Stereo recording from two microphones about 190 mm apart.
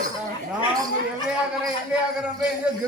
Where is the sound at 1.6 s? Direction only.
5° right (ahead or behind).